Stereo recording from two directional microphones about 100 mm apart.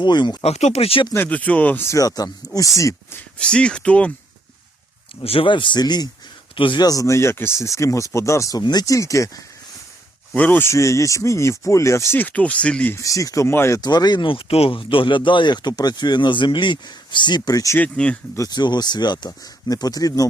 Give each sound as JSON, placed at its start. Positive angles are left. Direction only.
{"t": 0.0, "sound": "speech", "side_deg": 45}
{"t": 0.4, "sound": "speech", "side_deg": 90}
{"t": 1.1, "sound": "speech", "side_deg": 15}
{"t": 1.9, "sound": "speech", "side_deg": 35}
{"t": 3.3, "sound": "speech", "side_deg": 10}
{"t": 5.2, "sound": "a man's voice", "side_deg": 65}
{"t": 6.8, "sound": "speech", "side_deg": 35}
{"t": 10.3, "sound": "speech", "side_deg": 15}
{"t": 12.9, "sound": "speech", "side_deg": 35}
{"t": 13.8, "sound": "speech", "side_deg": 45}
{"t": 17.7, "sound": "speech", "side_deg": 15}
{"t": 18.3, "sound": "speech", "side_deg": 40}